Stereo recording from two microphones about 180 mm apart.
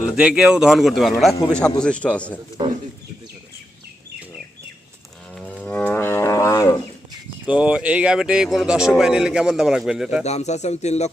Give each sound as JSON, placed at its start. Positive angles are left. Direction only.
{"t": 0.2, "sound": "a man's voice", "side_deg": -5}
{"t": 5.3, "sound": "wild animals", "side_deg": 5}
{"t": 7.4, "sound": "speech", "side_deg": -5}
{"t": 10.2, "sound": "speech", "side_deg": 40}